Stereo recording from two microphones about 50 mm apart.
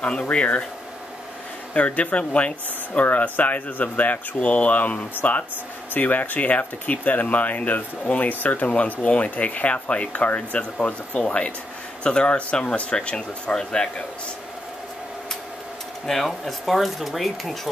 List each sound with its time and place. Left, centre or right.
0.3 s speech: left
1.7 s speech: left
16.1 s speech: centre